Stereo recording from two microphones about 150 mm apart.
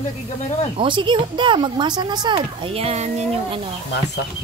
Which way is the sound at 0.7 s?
35° right (ahead or behind).